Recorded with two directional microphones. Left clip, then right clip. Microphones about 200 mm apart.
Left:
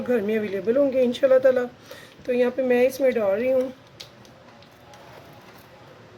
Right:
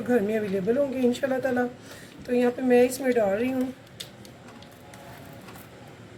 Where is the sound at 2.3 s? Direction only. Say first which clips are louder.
Left 1 dB; 50° left (ahead or behind).